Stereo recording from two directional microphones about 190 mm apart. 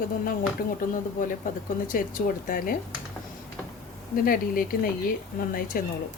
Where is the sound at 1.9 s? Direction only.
45° left (ahead or behind).